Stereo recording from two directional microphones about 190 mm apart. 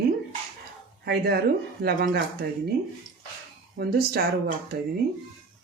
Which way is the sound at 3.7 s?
55° right (ahead or behind).